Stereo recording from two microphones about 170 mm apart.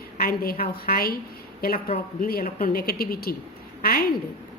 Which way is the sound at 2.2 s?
60° left (ahead or behind).